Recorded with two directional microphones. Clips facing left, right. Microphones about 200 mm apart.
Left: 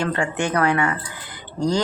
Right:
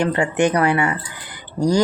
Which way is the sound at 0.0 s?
15° right (ahead or behind).